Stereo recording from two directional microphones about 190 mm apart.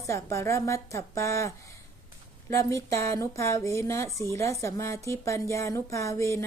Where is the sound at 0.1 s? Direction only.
15° left (ahead or behind).